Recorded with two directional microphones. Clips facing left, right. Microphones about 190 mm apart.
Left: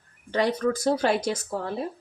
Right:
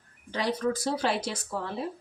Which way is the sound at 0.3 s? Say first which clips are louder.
Left 4 dB; 50° left (ahead or behind).